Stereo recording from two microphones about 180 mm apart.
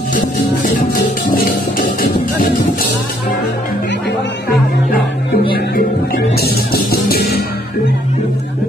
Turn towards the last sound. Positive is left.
turn(degrees=60)  # may be behind; listen again after turning